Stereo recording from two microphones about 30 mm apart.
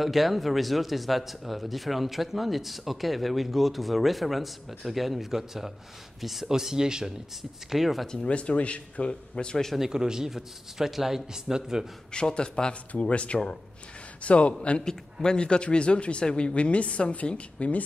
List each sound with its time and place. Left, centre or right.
0.0 s speech: centre
6.5 s speech: centre
7.7 s a man's voice: centre
8.3 s speech: left
9.3 s speech: left
9.8 s a man's voice: centre
12.1 s a man's voice: left
13.1 s speech: left
15.2 s speech: left
16.5 s speech: left